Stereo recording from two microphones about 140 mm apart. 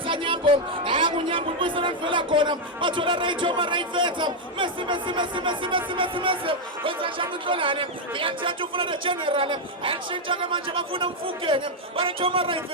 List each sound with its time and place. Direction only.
0.0 s speech: 35° right (ahead or behind)